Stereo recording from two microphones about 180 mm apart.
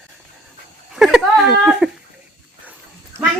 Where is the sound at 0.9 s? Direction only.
Centre (ahead or behind).